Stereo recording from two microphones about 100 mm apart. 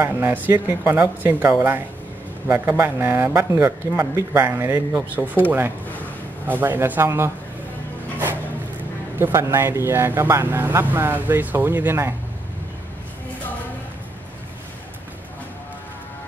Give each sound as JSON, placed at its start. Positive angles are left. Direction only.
{"t": 0.0, "sound": "speech", "side_deg": -20}
{"t": 9.2, "sound": "speech", "side_deg": -25}